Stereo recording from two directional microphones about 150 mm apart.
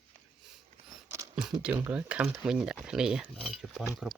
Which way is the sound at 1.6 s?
10° right (ahead or behind).